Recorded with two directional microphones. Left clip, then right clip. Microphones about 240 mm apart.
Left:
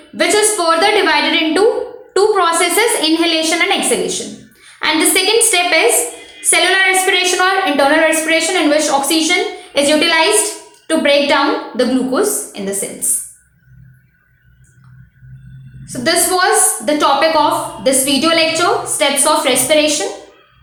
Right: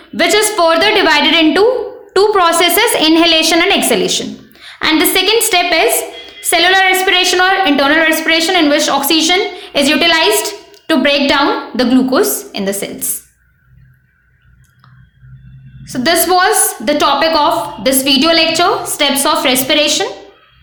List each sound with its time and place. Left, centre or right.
0.2 s a woman's voice: right
15.8 s a woman's voice: right